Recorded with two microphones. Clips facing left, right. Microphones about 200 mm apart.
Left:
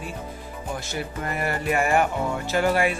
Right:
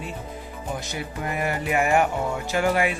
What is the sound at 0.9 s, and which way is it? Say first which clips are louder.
Music: even; 15° right (ahead or behind).